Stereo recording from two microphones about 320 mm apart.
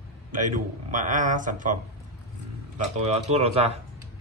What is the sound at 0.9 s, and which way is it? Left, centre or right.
Speech, right.